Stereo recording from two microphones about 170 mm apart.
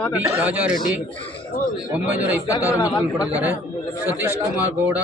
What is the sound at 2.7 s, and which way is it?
Speech, 20° left (ahead or behind).